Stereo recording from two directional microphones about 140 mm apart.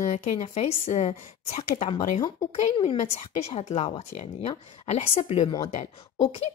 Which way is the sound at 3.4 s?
50° left (ahead or behind).